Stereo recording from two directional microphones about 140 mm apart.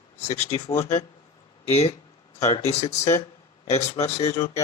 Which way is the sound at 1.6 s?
50° left (ahead or behind).